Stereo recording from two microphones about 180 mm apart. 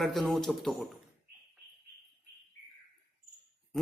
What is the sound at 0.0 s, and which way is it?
Speech, centre (ahead or behind).